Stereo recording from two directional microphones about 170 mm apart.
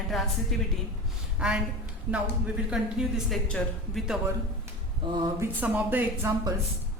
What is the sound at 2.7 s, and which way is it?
A woman's voice, centre (ahead or behind).